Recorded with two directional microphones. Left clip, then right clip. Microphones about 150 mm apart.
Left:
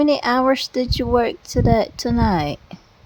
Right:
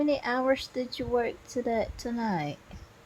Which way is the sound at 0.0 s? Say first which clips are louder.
Left 10 dB; 90° left.